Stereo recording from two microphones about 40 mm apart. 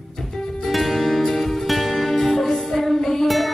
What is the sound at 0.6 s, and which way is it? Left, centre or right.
Music, centre.